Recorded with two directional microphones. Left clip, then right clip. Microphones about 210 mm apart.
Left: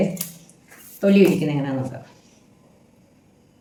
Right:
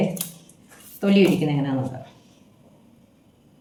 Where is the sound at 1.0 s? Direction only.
5° left (ahead or behind).